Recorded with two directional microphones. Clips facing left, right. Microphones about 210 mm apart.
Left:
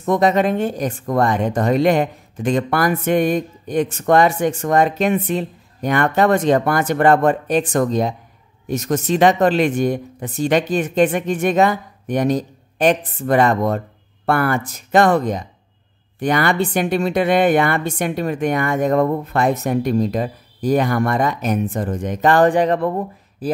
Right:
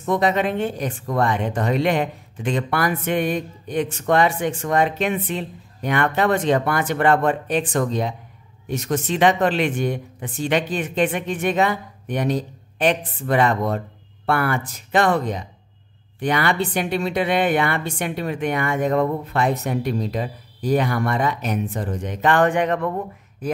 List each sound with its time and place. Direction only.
0.0 s speech: 45° left (ahead or behind)